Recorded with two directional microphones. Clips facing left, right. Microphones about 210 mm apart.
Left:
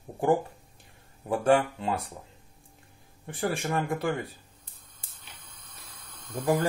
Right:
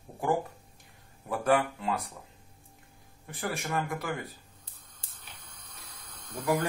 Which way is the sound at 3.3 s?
30° left (ahead or behind).